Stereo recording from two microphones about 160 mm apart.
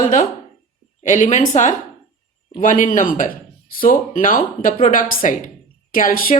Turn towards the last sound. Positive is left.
turn(degrees=60)  # may be behind; listen again after turning